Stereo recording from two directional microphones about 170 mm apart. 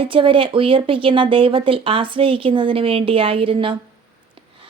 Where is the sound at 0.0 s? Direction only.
30° right (ahead or behind).